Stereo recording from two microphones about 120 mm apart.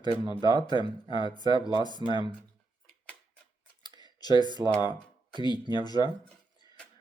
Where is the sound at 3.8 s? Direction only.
35° left (ahead or behind).